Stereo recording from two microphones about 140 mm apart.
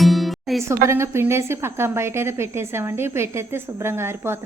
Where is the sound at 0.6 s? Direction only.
20° right (ahead or behind).